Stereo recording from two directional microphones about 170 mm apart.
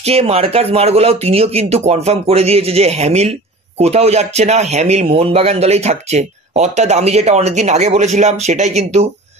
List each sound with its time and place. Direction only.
0.0 s speech: 35° right (ahead or behind)